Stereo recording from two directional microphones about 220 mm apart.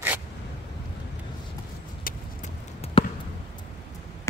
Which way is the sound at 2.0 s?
30° left (ahead or behind).